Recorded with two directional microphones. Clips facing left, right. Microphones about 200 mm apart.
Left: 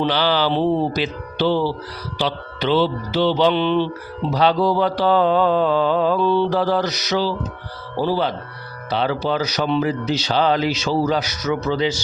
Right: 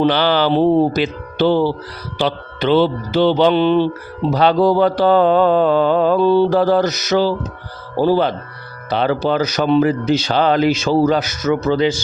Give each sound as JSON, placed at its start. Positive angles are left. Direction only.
{"t": 0.0, "sound": "speech", "side_deg": -55}